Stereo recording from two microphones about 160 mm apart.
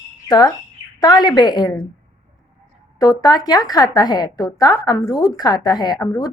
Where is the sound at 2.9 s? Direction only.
25° left (ahead or behind).